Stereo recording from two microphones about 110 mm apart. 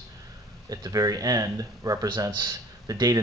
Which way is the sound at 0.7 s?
35° right (ahead or behind).